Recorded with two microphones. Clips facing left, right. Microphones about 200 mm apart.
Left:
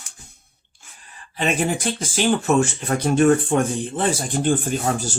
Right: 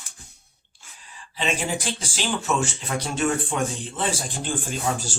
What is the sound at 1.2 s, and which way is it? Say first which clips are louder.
Speech: left 5 dB; 55° left (ahead or behind).